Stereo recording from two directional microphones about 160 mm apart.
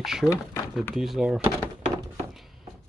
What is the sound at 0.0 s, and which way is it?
Speech, 5° right (ahead or behind).